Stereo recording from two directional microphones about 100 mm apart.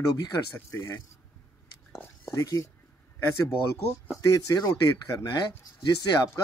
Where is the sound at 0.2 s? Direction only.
35° left (ahead or behind).